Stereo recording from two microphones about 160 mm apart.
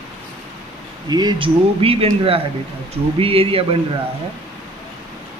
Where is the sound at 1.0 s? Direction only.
25° right (ahead or behind).